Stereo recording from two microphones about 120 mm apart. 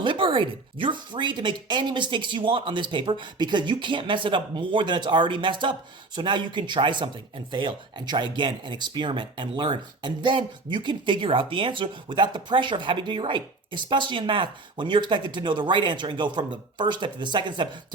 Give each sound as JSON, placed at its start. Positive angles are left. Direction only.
{"t": 0.0, "sound": "speech", "side_deg": -45}